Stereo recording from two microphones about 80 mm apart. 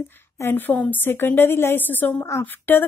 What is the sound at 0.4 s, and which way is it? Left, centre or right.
A woman's voice, left.